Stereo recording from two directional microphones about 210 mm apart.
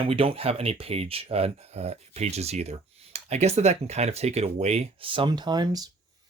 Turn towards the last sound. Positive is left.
turn(degrees=-20)  # may be behind; listen again after turning